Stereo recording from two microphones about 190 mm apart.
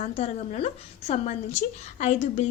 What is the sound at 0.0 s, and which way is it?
Speech, 35° left (ahead or behind).